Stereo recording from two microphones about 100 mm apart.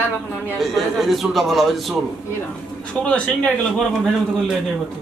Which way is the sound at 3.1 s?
10° left (ahead or behind).